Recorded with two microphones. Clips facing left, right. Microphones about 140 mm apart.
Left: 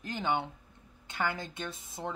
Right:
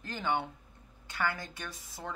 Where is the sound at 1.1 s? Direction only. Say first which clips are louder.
Left 1 dB; 20° left (ahead or behind).